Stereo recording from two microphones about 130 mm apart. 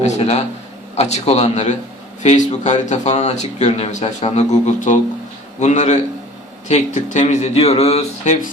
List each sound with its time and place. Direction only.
0.0 s a man's voice: 55° left (ahead or behind)